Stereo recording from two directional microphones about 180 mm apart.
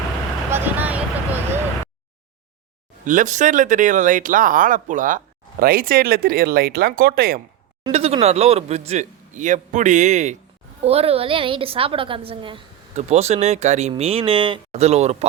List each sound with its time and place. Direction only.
0.5 s vehicle: 10° right (ahead or behind)
3.0 s speech: 45° right (ahead or behind)
7.9 s a man's voice: 35° right (ahead or behind)